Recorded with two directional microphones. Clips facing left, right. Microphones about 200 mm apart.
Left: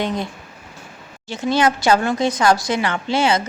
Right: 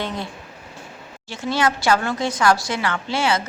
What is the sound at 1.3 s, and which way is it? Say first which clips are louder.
A woman's voice: left 4 dB; 20° left (ahead or behind).